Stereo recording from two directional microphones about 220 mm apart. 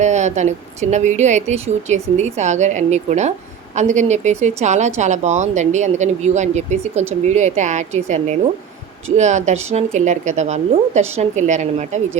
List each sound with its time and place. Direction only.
0.0 s speech: 30° right (ahead or behind)